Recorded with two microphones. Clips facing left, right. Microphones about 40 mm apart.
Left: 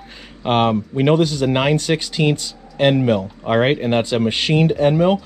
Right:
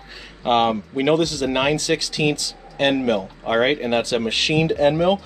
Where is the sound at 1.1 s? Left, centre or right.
Centre.